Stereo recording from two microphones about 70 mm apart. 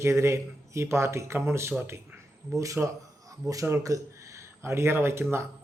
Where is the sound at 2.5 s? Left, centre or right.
Right.